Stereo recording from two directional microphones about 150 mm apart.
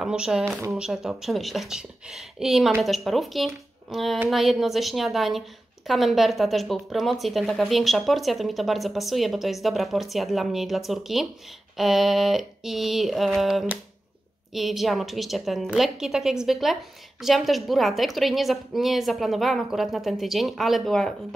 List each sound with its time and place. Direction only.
0.0 s speech: 5° right (ahead or behind)